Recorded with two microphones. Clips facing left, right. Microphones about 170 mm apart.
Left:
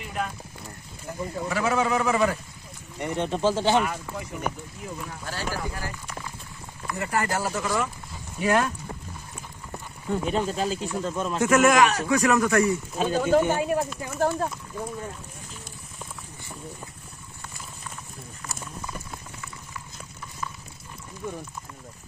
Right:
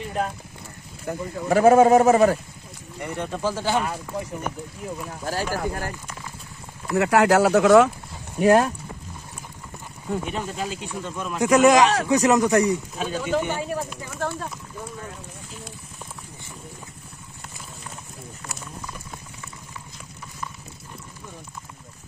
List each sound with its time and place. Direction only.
1.1 s speech: 60° right (ahead or behind)
1.5 s speech: 50° right (ahead or behind)
3.0 s speech: 20° left (ahead or behind)
5.2 s speech: 40° right (ahead or behind)
7.0 s speech: 80° right
8.4 s speech: 35° right (ahead or behind)
10.2 s speech: 35° left (ahead or behind)
11.4 s speech: 15° right (ahead or behind)
13.0 s speech: 45° left (ahead or behind)